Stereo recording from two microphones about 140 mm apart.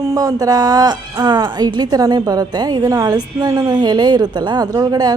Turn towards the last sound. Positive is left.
turn(degrees=-30)  # may be behind; listen again after turning